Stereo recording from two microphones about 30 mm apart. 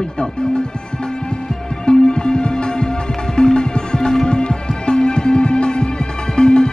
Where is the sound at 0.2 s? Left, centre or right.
Left.